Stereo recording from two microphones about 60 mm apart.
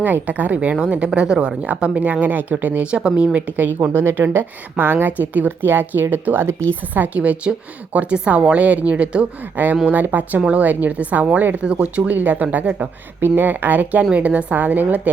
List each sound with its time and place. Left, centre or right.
0.0 s a woman's voice: right
6.9 s a woman's voice: right
9.6 s a woman's voice: right